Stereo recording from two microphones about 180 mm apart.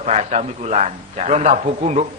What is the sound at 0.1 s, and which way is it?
A man's voice, 40° right (ahead or behind).